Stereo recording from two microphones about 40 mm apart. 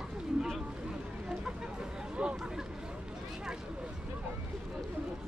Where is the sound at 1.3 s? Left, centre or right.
Right.